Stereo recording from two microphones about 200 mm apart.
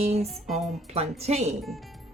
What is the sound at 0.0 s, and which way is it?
Speech, 30° right (ahead or behind).